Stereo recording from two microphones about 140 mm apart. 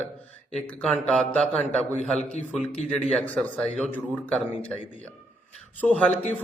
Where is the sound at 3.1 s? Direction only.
5° left (ahead or behind).